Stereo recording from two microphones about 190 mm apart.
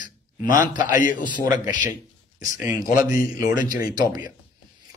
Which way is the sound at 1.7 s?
40° left (ahead or behind).